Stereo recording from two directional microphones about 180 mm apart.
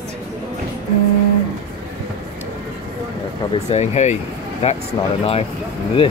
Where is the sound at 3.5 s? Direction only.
35° left (ahead or behind).